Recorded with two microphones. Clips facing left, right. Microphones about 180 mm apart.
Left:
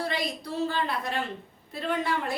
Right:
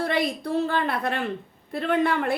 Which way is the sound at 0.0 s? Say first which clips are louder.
Right 6 dB; 55° right (ahead or behind).